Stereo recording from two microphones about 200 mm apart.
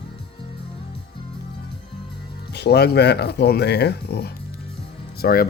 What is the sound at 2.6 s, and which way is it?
Speech, 55° left (ahead or behind).